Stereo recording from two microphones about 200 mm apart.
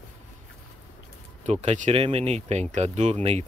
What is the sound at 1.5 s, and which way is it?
Speech, 35° right (ahead or behind).